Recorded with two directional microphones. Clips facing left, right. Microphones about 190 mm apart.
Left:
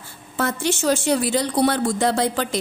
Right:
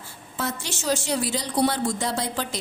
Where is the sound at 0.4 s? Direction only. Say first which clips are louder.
Left 8 dB; 55° left (ahead or behind).